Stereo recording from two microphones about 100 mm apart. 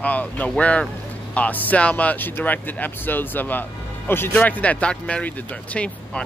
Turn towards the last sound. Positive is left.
turn(degrees=10)  # may be behind; listen again after turning